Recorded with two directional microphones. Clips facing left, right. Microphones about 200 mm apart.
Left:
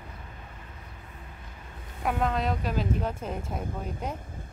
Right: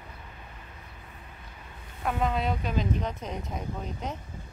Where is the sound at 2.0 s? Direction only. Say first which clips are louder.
Left 1 dB; centre (ahead or behind).